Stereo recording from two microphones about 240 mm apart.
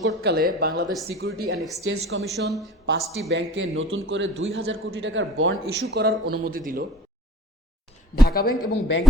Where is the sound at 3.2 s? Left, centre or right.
Right.